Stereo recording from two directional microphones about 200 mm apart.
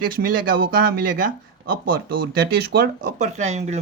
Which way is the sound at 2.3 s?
50° right (ahead or behind).